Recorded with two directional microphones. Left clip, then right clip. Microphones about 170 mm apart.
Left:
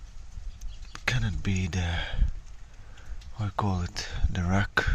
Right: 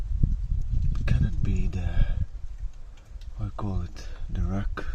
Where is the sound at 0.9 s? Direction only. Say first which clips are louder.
Left 6 dB; 10° left (ahead or behind).